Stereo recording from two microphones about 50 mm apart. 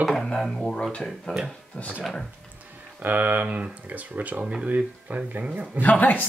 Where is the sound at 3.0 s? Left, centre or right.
Right.